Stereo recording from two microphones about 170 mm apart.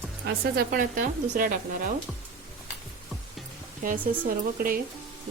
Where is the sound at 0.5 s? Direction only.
55° right (ahead or behind).